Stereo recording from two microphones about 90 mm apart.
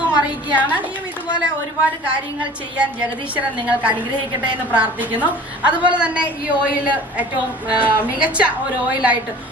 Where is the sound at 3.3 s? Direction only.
15° right (ahead or behind).